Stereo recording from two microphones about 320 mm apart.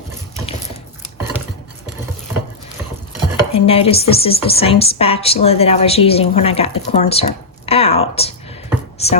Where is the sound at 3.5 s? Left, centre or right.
Centre.